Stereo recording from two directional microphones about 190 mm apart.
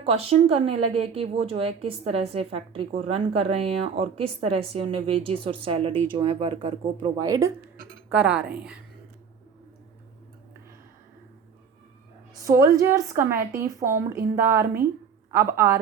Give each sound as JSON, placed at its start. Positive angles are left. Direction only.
{"t": 0.0, "sound": "a woman's voice", "side_deg": -30}
{"t": 8.1, "sound": "a woman's voice", "side_deg": -5}
{"t": 12.3, "sound": "a woman's voice", "side_deg": -15}